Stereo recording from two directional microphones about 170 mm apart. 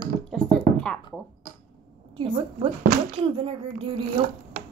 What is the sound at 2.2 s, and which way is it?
A child's voice, 30° right (ahead or behind).